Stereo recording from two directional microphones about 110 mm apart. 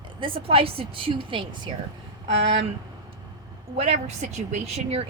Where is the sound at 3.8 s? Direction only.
85° right.